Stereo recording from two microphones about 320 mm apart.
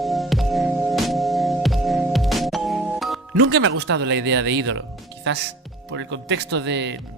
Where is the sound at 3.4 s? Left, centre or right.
Right.